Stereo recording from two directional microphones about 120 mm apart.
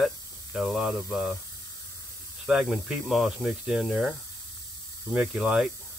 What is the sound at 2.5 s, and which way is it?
Speech, 5° right (ahead or behind).